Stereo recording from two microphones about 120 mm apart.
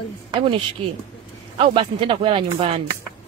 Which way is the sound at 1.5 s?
45° right (ahead or behind).